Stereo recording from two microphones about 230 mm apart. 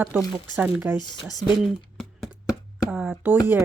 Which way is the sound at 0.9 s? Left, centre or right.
Centre.